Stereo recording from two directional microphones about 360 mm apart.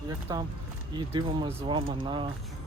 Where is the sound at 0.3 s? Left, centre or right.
Centre.